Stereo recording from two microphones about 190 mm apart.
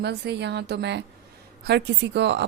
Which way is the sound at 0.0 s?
60° right (ahead or behind).